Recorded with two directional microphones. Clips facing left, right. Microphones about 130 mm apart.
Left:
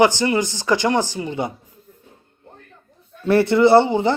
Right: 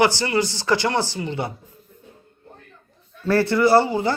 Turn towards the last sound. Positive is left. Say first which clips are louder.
# left 3 dB
turn(degrees=20)  # may be behind; listen again after turning